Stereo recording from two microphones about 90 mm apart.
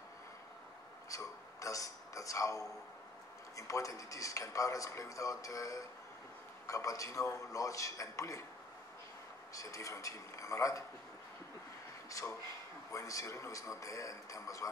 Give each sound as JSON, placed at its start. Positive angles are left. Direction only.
{"t": 1.1, "sound": "speech", "side_deg": 40}
{"t": 9.5, "sound": "speech", "side_deg": 40}
{"t": 12.1, "sound": "speech", "side_deg": 35}